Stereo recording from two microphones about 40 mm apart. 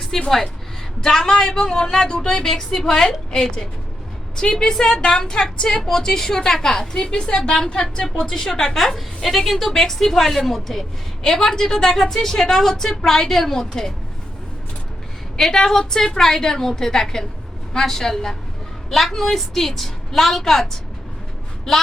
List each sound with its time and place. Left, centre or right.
0.0 s a woman's voice: centre
4.8 s a woman's voice: left
15.4 s a woman's voice: centre
21.7 s a woman's voice: centre